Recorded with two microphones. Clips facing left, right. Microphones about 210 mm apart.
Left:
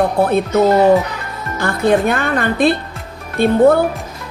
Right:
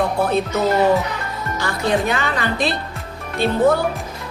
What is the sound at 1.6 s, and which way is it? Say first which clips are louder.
Speech: left 6 dB; 55° left (ahead or behind).